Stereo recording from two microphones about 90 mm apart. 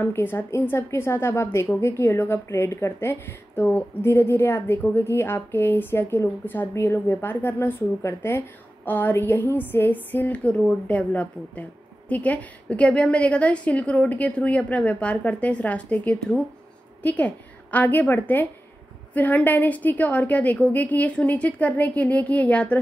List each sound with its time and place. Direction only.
0.0 s a woman's voice: 25° left (ahead or behind)